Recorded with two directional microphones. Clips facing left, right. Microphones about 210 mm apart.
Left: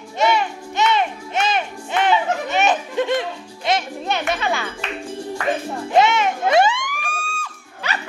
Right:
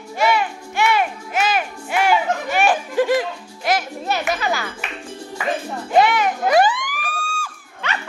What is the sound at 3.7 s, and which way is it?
Music, 25° left (ahead or behind).